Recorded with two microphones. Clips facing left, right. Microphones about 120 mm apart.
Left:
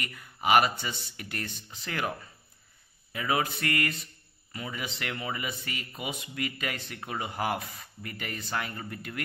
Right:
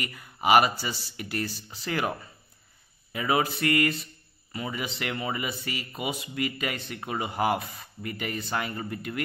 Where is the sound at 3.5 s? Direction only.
5° right (ahead or behind).